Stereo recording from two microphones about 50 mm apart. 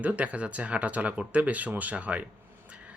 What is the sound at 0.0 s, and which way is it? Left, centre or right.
Speech, right.